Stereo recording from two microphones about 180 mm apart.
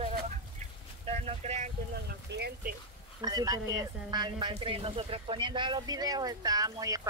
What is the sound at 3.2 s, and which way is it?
Speech, 20° right (ahead or behind).